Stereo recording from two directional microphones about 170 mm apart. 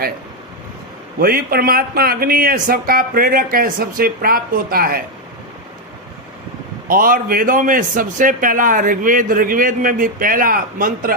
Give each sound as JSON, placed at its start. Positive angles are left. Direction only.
{"t": 1.2, "sound": "a man's voice", "side_deg": -60}
{"t": 6.8, "sound": "a man's voice", "side_deg": -55}